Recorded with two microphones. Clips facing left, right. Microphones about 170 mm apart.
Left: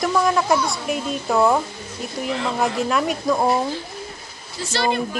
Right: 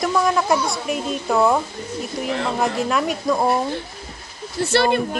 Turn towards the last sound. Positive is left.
turn(degrees=-60)  # may be behind; listen again after turning